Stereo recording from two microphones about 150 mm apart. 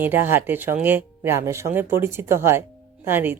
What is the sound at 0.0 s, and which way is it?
Speech, 15° right (ahead or behind).